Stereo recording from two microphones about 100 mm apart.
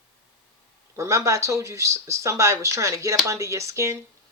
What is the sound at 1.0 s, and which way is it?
Speech, 30° right (ahead or behind).